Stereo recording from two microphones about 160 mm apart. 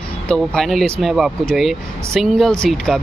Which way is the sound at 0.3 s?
Centre (ahead or behind).